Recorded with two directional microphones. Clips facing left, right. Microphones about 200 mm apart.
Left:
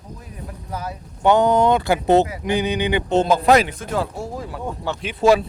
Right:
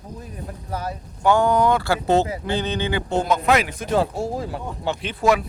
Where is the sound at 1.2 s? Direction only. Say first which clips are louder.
Left 2 dB; 20° left (ahead or behind).